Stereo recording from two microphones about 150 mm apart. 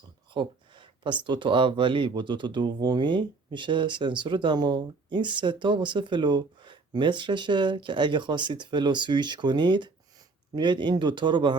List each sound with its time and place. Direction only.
0.3 s speech: 35° right (ahead or behind)